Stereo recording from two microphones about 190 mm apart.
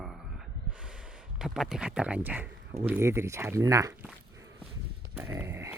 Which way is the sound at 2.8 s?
10° right (ahead or behind).